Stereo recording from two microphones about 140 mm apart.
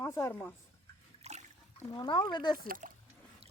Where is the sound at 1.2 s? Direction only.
55° right (ahead or behind).